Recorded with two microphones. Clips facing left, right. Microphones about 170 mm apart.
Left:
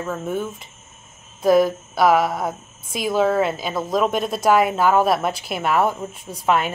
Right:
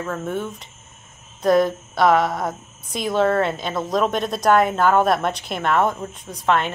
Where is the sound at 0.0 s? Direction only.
5° left (ahead or behind).